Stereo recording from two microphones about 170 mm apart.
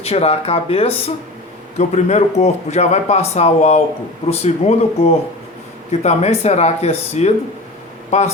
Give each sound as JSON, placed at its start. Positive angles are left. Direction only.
{"t": 0.0, "sound": "speech", "side_deg": 40}